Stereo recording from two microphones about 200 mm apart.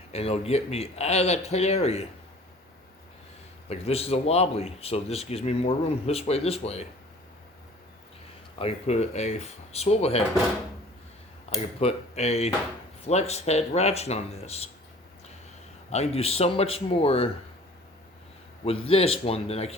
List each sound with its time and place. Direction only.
0.1 s speech: 30° left (ahead or behind)
3.7 s speech: 30° left (ahead or behind)
8.5 s speech: 30° left (ahead or behind)
11.5 s speech: 30° left (ahead or behind)
15.9 s speech: 30° left (ahead or behind)
18.6 s speech: 30° left (ahead or behind)